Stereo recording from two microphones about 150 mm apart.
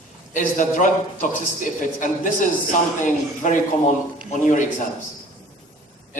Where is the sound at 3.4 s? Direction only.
60° left (ahead or behind).